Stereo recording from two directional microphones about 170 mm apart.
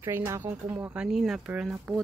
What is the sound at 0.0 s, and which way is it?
Speech, 15° right (ahead or behind).